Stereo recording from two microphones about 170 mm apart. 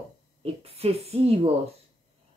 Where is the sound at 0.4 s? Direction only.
35° right (ahead or behind).